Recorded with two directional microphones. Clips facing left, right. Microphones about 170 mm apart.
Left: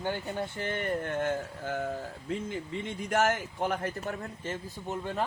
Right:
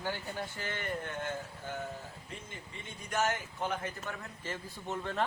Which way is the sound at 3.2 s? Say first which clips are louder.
Left 5 dB; 60° left (ahead or behind).